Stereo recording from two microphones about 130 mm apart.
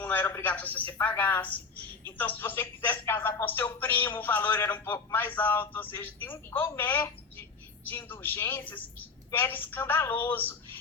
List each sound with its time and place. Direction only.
0.0 s a woman's voice: 15° left (ahead or behind)